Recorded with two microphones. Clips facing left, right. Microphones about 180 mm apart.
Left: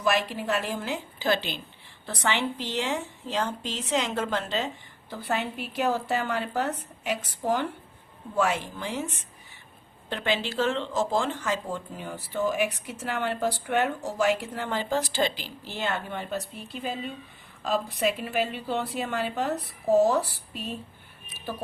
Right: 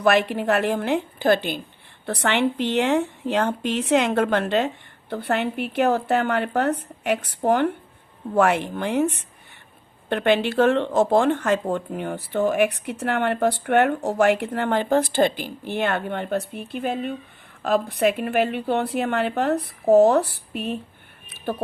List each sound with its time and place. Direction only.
0.0 s speech: 60° right (ahead or behind)
2.0 s speech: 60° right (ahead or behind)
21.2 s a sound: 60° right (ahead or behind)